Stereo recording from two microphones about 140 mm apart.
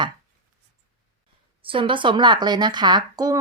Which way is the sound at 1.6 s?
40° right (ahead or behind).